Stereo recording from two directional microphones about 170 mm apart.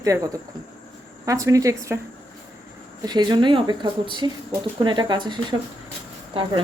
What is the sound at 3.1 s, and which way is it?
Speech, 25° right (ahead or behind).